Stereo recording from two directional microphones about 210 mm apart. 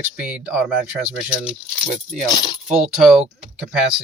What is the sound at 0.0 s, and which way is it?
Speech, 5° right (ahead or behind).